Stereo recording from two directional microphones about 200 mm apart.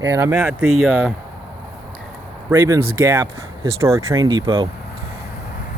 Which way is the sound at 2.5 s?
15° right (ahead or behind).